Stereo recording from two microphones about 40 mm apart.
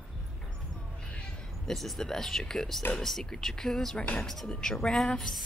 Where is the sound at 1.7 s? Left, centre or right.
Centre.